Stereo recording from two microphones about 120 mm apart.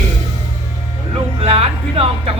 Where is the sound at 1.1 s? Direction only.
55° right (ahead or behind).